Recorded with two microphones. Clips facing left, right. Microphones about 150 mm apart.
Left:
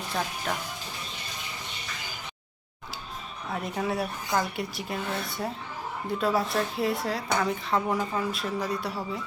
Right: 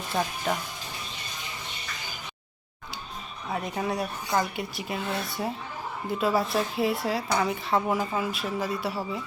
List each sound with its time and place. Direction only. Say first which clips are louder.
0.1 s speech: right 3 dB; 10° right (ahead or behind)
3.5 s speech: even; centre (ahead or behind)